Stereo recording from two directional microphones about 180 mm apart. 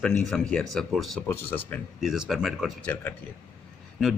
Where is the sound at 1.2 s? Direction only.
10° left (ahead or behind).